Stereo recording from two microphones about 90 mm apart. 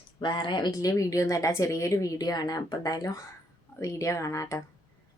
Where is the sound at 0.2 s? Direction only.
60° left (ahead or behind).